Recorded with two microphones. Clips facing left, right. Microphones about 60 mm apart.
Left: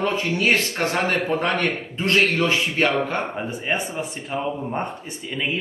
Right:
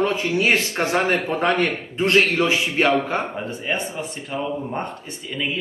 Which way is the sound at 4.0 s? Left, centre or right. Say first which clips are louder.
Even; centre.